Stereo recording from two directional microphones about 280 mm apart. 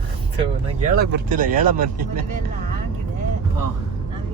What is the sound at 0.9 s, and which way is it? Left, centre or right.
Speech, right.